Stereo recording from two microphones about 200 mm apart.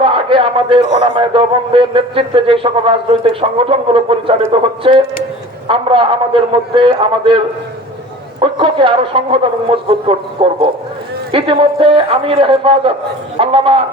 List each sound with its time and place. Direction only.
0.0 s a man's voice: 25° right (ahead or behind)
11.3 s a man's voice: 25° right (ahead or behind)